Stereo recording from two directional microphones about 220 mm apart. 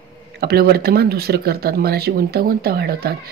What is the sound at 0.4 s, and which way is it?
Speech, 45° right (ahead or behind).